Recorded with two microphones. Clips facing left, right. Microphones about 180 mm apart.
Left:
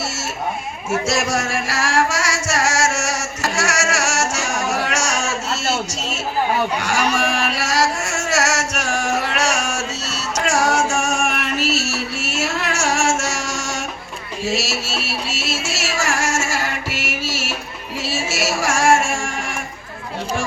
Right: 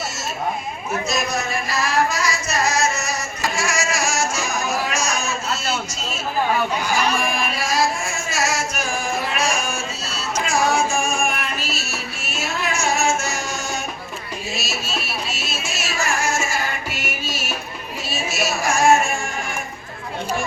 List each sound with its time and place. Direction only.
0.9 s music: 85° left
6.7 s a sound: 75° left (ahead or behind)
14.4 s music: 80° left